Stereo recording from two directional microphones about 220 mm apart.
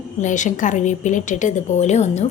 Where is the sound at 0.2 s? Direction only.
35° left (ahead or behind).